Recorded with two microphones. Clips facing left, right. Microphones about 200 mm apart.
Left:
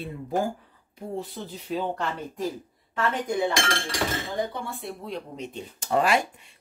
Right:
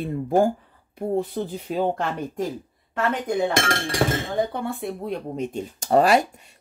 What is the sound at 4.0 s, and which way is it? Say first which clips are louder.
Speech: right 6 dB; 50° right (ahead or behind).